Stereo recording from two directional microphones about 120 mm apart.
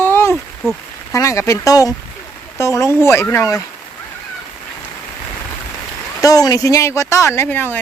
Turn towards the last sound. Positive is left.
turn(degrees=20)  # may be behind; listen again after turning